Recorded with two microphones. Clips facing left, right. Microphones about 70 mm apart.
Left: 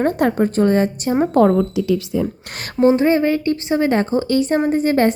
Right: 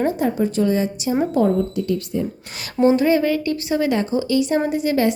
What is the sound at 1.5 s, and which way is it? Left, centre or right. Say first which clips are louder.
Speech: left 4 dB; left.